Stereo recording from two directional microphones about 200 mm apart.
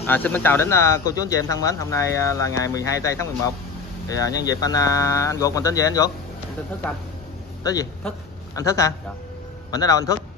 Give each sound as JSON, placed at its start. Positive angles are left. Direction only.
{"t": 0.0, "sound": "speech", "side_deg": 10}
{"t": 7.6, "sound": "speech", "side_deg": 15}